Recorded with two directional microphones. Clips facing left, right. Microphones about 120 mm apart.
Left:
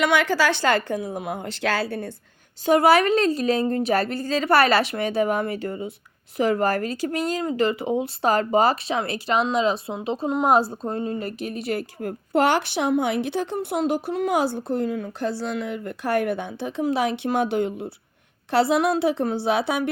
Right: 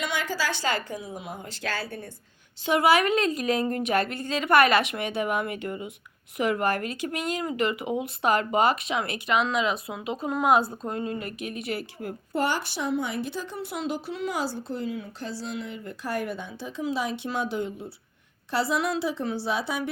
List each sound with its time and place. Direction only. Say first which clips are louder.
0.0 s speech: left 9 dB; 70° left (ahead or behind)
2.6 s speech: left 4 dB; 40° left (ahead or behind)
12.3 s speech: left 7 dB; 70° left (ahead or behind)